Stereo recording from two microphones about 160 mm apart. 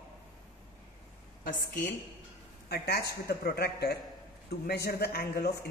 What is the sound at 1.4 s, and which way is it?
Speech, 60° left (ahead or behind).